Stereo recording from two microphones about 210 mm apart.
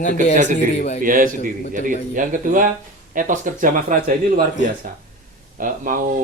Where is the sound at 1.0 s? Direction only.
40° right (ahead or behind).